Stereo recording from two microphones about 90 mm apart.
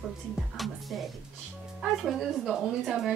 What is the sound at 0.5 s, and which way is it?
A woman's voice, centre (ahead or behind).